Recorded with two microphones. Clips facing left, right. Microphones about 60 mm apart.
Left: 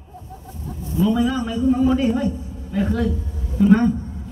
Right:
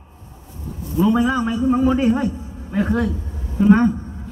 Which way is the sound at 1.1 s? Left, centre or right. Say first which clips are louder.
Right 3 dB; right.